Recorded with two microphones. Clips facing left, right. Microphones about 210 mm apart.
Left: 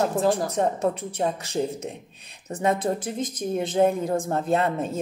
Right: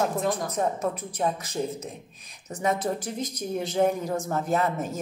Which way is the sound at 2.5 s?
60° left (ahead or behind).